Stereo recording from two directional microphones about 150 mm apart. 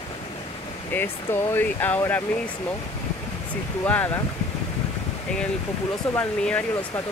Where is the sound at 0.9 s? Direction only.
15° left (ahead or behind).